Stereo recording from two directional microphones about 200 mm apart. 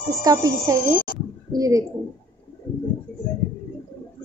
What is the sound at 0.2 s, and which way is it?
A woman's voice, 15° right (ahead or behind).